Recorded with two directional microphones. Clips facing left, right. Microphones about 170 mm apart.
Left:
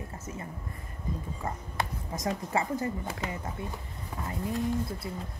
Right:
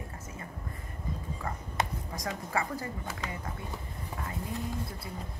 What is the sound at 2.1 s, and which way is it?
A woman's voice, 25° left (ahead or behind).